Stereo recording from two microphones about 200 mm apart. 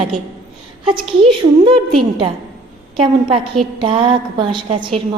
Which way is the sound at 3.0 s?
25° right (ahead or behind).